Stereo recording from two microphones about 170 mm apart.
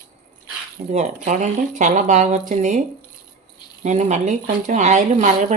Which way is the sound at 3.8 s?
45° right (ahead or behind).